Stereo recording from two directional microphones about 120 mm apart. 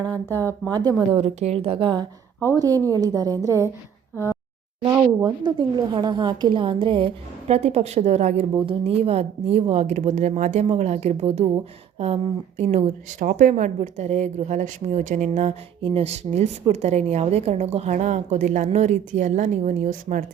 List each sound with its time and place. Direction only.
0.0 s speech: 15° left (ahead or behind)
0.7 s a woman's voice: 35° right (ahead or behind)
1.1 s a woman's voice: 60° right (ahead or behind); by 2.0 s 40° right (ahead or behind)
2.6 s a woman's voice: 30° right (ahead or behind)
4.1 s speech: 20° left (ahead or behind)
4.9 s a woman's voice: 40° right (ahead or behind)
7.4 s speech: 65° right (ahead or behind)
8.6 s a woman's voice: 50° right (ahead or behind); by 20.1 s 90° right